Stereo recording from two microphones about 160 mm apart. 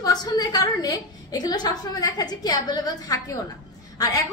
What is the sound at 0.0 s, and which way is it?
A woman's voice, 25° left (ahead or behind).